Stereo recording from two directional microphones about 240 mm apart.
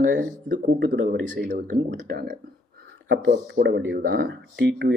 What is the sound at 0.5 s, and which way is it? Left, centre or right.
Speech, right.